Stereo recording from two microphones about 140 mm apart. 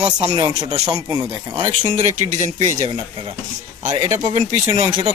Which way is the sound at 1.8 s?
60° right (ahead or behind).